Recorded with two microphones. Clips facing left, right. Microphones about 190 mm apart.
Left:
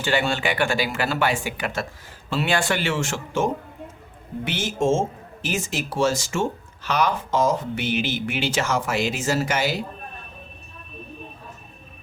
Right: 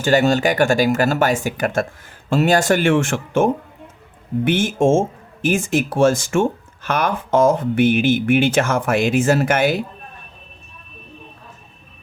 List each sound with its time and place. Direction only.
0.0 s speech: 40° right (ahead or behind)